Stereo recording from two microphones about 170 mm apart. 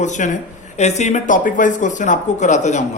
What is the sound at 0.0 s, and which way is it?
Speech, 45° left (ahead or behind).